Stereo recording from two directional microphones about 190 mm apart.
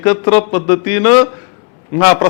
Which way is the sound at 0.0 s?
10° left (ahead or behind).